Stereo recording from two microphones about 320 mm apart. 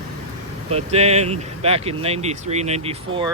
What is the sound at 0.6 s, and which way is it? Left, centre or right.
Speech, centre.